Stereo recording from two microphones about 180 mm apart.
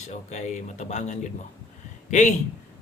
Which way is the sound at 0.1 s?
40° left (ahead or behind).